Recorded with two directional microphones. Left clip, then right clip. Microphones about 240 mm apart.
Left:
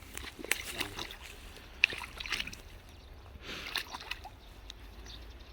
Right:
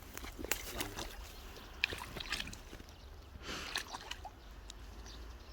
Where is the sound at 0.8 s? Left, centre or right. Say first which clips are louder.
Left 4 dB; centre.